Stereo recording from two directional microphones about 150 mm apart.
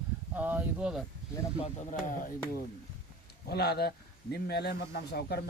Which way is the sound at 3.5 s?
90° left.